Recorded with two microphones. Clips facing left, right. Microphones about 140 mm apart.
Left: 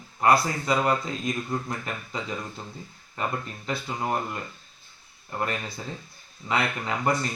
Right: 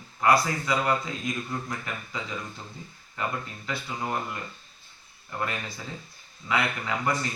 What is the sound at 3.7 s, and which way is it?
Speech, 25° left (ahead or behind).